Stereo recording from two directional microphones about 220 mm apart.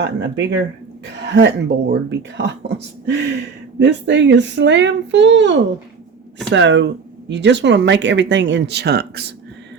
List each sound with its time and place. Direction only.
0.0 s speech: 50° right (ahead or behind)